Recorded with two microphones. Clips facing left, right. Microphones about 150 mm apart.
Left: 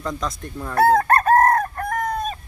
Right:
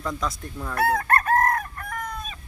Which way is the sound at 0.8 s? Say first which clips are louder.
Left 7 dB; 35° left (ahead or behind).